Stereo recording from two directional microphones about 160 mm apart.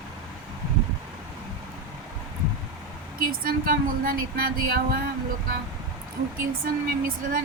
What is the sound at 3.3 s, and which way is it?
Speech, 65° right (ahead or behind).